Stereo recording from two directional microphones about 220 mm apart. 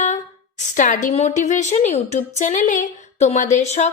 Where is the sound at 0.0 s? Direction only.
30° left (ahead or behind).